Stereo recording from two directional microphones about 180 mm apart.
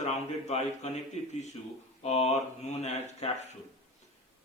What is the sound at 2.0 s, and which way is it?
Speech, 35° left (ahead or behind).